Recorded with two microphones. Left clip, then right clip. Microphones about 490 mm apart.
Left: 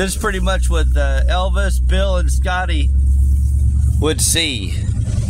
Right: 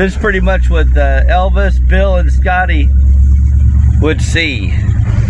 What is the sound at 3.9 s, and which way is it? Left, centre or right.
Speech, left.